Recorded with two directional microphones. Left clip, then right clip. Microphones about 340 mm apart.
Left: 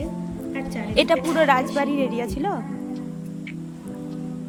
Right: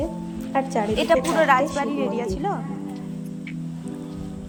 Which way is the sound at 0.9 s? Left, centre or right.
Centre.